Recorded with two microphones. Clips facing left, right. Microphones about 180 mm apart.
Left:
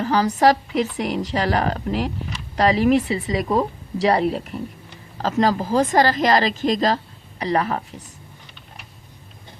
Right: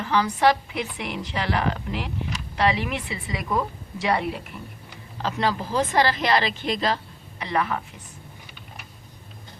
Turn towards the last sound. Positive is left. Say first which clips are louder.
# left 4 dB
turn(degrees=35)  # may be behind; listen again after turning